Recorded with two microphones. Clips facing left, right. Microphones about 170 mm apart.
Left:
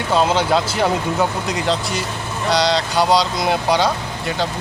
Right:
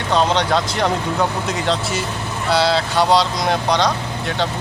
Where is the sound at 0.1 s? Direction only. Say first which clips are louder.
Left 1 dB; 5° left (ahead or behind).